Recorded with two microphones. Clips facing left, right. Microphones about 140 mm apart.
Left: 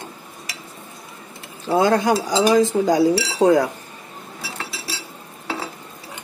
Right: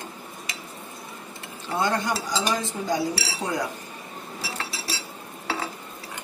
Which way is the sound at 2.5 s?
90° left.